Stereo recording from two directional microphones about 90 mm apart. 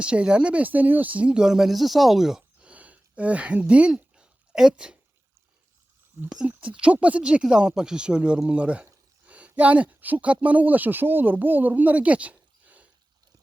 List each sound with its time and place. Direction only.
0.0 s speech: 10° right (ahead or behind)
6.5 s speech: 15° right (ahead or behind)
9.2 s a sound: 15° right (ahead or behind)
9.6 s speech: 15° right (ahead or behind)